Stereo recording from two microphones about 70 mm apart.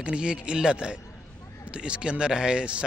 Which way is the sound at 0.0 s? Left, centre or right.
Centre.